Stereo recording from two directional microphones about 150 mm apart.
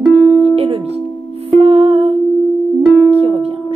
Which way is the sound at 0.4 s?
40° right (ahead or behind).